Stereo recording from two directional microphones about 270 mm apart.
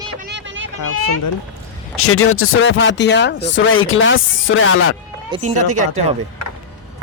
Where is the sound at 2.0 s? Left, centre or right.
Left.